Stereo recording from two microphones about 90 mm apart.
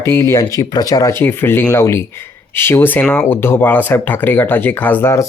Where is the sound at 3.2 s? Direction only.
25° left (ahead or behind).